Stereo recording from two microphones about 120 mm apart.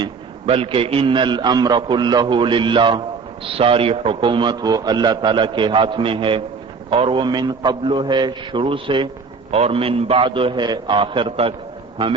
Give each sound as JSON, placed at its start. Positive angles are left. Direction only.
{"t": 0.0, "sound": "a man's voice", "side_deg": -50}
{"t": 9.5, "sound": "a man's voice", "side_deg": -60}